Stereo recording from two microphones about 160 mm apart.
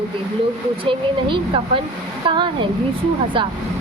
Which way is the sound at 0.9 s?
30° right (ahead or behind).